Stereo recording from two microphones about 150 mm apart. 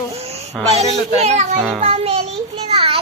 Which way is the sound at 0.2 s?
45° right (ahead or behind).